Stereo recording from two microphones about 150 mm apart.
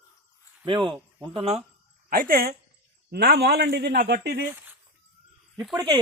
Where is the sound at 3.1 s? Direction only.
90° right.